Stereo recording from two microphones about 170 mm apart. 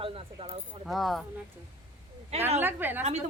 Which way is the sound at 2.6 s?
10° right (ahead or behind).